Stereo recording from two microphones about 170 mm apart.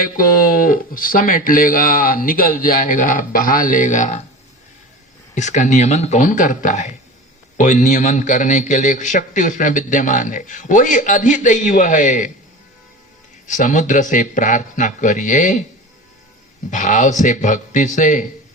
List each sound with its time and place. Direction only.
0.0 s speech: 55° left (ahead or behind)
5.3 s a man's voice: 45° left (ahead or behind)
13.5 s a man's voice: 45° left (ahead or behind)
16.7 s a man's voice: 45° left (ahead or behind)